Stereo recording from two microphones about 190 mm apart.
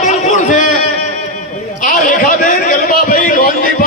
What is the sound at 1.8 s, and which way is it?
A man's voice, 45° left (ahead or behind).